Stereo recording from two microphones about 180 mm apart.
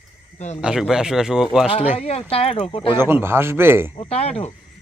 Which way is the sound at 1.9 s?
35° left (ahead or behind).